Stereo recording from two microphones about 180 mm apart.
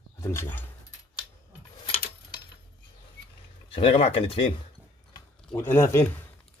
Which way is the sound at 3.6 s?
30° left (ahead or behind).